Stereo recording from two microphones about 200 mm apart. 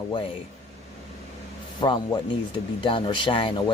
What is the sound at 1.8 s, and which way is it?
Speech, 20° left (ahead or behind).